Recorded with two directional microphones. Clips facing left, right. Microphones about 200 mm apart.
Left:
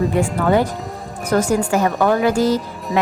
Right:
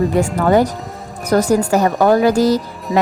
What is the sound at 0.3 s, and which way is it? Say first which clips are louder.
A woman's voice: right 3 dB; 40° right (ahead or behind).